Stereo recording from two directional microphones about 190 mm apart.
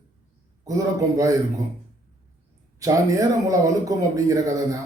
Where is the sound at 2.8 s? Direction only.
15° right (ahead or behind).